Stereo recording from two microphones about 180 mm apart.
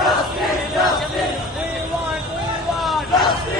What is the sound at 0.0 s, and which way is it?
Crowd, centre (ahead or behind).